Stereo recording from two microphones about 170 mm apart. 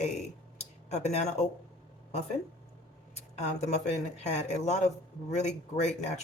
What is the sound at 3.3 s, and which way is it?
Speech, 40° left (ahead or behind).